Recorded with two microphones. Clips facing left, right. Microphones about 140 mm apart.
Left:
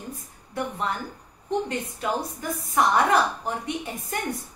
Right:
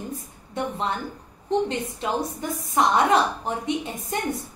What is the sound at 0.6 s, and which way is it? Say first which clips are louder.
A woman's voice: right 2 dB; 25° right (ahead or behind).